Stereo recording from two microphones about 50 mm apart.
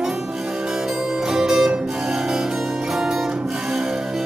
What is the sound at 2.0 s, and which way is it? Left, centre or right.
Harpsichord, centre.